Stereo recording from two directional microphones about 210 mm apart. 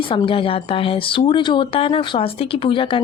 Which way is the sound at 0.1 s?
25° left (ahead or behind).